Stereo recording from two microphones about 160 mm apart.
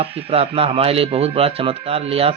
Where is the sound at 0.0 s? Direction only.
35° right (ahead or behind).